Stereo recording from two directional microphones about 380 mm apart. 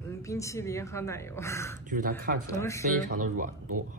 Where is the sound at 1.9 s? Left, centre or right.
Right.